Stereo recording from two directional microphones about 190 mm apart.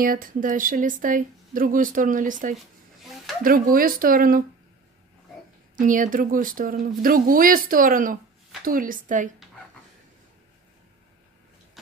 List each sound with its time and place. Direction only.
0.0 s speech: 50° right (ahead or behind)
5.8 s speech: 45° right (ahead or behind)